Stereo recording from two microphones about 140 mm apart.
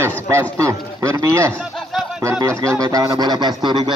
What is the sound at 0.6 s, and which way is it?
Speech, 20° right (ahead or behind).